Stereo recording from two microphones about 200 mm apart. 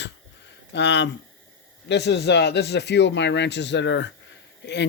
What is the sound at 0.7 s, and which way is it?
Speech, 60° left (ahead or behind).